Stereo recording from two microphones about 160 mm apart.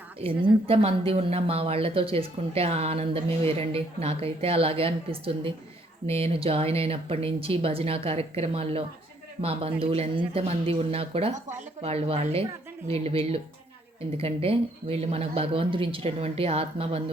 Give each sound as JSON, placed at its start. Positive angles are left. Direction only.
{"t": 0.2, "sound": "speech", "side_deg": -35}